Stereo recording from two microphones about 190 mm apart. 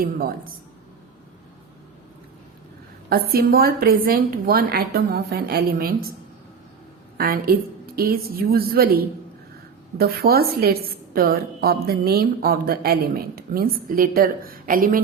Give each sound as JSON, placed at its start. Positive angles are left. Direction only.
{"t": 0.0, "sound": "a woman's voice", "side_deg": -50}
{"t": 3.1, "sound": "a woman's voice", "side_deg": -50}
{"t": 7.2, "sound": "a woman's voice", "side_deg": -50}